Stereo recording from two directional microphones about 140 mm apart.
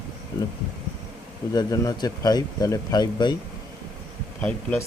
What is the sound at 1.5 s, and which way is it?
Speech, 25° left (ahead or behind).